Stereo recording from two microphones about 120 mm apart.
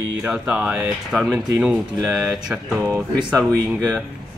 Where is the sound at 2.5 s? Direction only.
20° right (ahead or behind).